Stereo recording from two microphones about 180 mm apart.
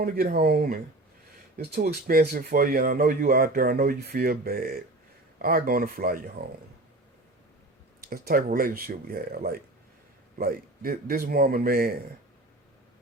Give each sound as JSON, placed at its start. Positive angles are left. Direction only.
{"t": 0.0, "sound": "speech", "side_deg": -55}
{"t": 8.1, "sound": "speech", "side_deg": -55}